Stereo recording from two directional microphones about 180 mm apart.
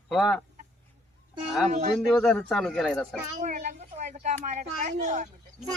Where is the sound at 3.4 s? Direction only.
45° right (ahead or behind).